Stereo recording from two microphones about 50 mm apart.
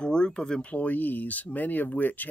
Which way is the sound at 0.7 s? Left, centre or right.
Left.